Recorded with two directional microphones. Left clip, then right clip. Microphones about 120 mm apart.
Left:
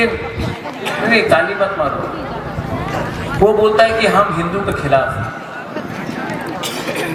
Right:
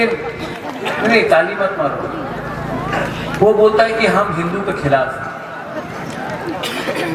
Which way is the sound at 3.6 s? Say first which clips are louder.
Even; 40° left (ahead or behind).